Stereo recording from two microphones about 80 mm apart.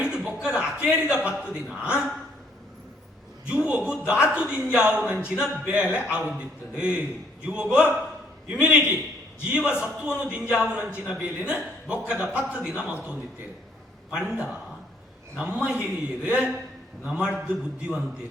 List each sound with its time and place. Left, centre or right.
0.3 s a man's voice: centre
3.4 s speech: centre